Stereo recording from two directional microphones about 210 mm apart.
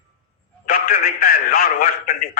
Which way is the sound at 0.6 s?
45° left (ahead or behind).